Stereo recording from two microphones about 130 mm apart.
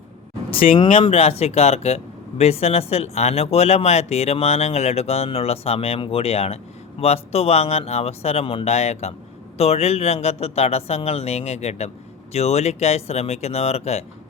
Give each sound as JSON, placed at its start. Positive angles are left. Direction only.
{"t": 0.5, "sound": "speech", "side_deg": 45}
{"t": 1.1, "sound": "speech", "side_deg": 50}